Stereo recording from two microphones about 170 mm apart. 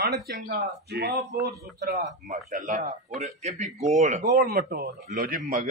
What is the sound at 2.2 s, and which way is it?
A man's voice, 45° right (ahead or behind).